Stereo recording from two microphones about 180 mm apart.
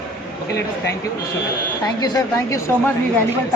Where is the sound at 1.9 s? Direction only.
20° left (ahead or behind).